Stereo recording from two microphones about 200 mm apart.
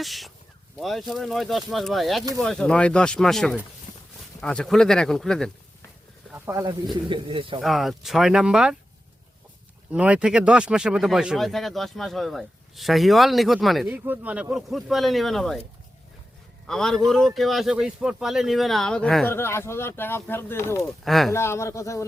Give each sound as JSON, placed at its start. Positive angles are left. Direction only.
{"t": 0.0, "sound": "speech", "side_deg": 0}
{"t": 6.3, "sound": "speech", "side_deg": -15}
{"t": 6.9, "sound": "speech", "side_deg": -25}
{"t": 7.6, "sound": "speech", "side_deg": 0}
{"t": 9.9, "sound": "speech", "side_deg": -5}
{"t": 16.6, "sound": "speech", "side_deg": 0}
{"t": 21.0, "sound": "speech", "side_deg": 0}
{"t": 21.3, "sound": "speech", "side_deg": 15}